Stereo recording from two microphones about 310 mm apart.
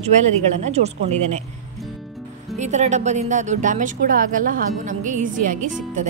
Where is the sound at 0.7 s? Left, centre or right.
Right.